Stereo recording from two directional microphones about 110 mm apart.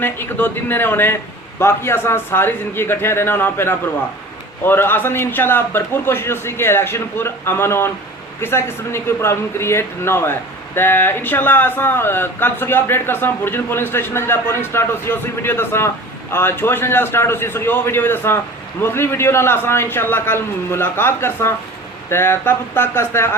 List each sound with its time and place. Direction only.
0.0 s speech: 20° left (ahead or behind)